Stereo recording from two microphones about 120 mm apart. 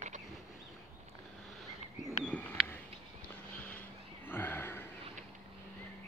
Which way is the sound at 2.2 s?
10° left (ahead or behind).